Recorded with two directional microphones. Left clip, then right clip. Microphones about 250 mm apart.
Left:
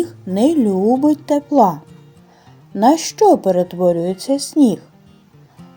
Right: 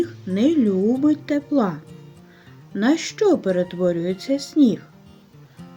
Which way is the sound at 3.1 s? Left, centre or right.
Left.